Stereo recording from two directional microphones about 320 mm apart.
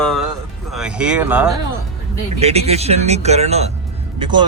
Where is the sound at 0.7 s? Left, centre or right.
Centre.